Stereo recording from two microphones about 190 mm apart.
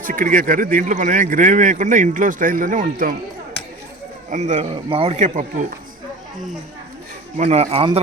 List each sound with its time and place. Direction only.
0.0 s a man's voice: 45° right (ahead or behind)
4.3 s speech: 40° right (ahead or behind)
7.3 s speech: 35° right (ahead or behind)